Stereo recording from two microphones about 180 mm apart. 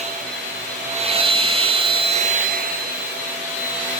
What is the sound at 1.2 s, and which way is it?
Vacuum cleaner, 30° right (ahead or behind).